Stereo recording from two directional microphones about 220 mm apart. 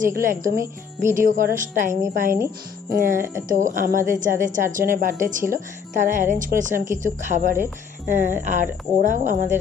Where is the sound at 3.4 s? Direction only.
35° right (ahead or behind).